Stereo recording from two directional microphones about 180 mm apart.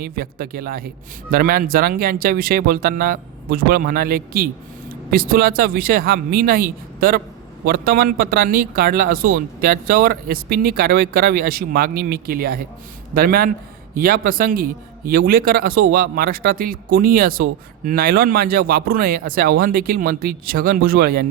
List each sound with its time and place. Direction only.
0.0 s speech: 55° right (ahead or behind)